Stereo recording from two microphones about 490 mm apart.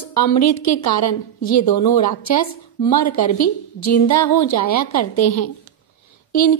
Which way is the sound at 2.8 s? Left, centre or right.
Left.